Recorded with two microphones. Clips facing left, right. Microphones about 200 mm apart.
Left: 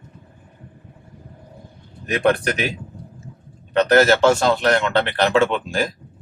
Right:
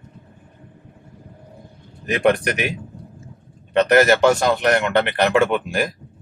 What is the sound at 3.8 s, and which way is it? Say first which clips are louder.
A man's voice: even; 20° right (ahead or behind).